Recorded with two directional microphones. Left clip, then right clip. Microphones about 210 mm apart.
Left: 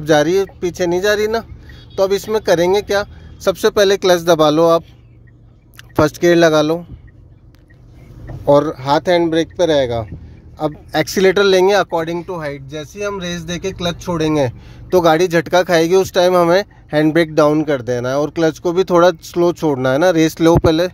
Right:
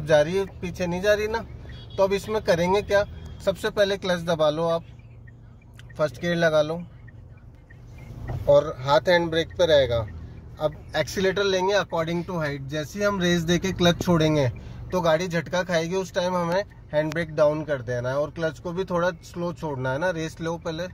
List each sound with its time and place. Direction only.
0.0 s speech: 45° left (ahead or behind)
8.5 s speech: 40° left (ahead or behind)
10.6 s speech: 45° left (ahead or behind); by 14.1 s centre (ahead or behind)
14.3 s speech: 40° left (ahead or behind)